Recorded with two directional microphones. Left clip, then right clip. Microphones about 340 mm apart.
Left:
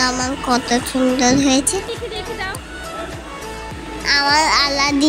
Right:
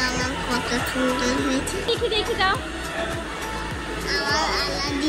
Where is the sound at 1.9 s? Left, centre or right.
Centre.